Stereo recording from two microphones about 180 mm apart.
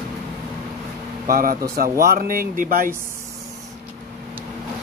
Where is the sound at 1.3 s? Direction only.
55° right (ahead or behind).